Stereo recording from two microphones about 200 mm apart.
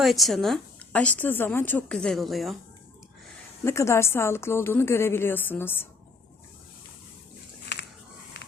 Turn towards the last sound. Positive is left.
turn(degrees=60)  # may be behind; listen again after turning